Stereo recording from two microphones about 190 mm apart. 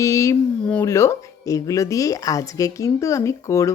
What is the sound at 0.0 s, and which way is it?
Speech, 15° left (ahead or behind).